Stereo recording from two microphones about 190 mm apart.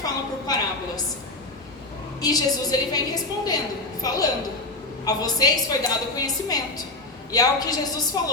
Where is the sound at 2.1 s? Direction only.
20° left (ahead or behind).